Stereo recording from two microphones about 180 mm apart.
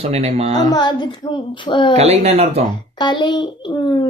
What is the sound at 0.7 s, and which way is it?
Speech, 25° left (ahead or behind).